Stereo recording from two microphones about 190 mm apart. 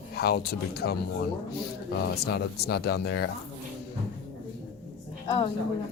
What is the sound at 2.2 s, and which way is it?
Speech, 55° left (ahead or behind).